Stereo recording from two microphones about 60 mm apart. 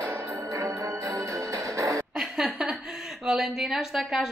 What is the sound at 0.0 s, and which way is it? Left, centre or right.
Music, right.